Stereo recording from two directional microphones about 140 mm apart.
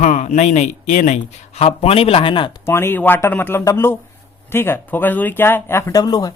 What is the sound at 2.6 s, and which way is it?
Speech, 15° left (ahead or behind).